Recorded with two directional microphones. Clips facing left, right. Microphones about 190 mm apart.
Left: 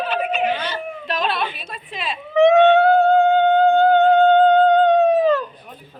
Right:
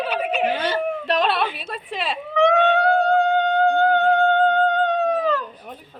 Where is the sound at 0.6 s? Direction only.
60° right (ahead or behind).